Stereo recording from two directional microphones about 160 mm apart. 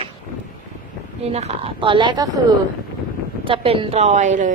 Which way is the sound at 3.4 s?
35° right (ahead or behind).